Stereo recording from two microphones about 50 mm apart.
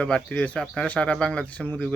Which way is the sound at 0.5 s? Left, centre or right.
Centre.